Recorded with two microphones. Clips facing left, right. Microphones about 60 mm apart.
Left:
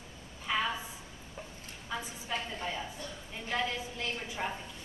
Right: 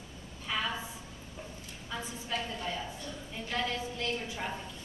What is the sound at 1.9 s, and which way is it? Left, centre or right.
A woman's voice, centre.